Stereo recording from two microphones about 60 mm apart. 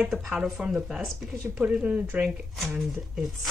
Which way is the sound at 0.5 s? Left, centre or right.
Centre.